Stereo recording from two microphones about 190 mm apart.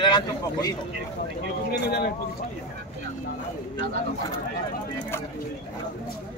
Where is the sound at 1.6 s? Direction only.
55° left (ahead or behind).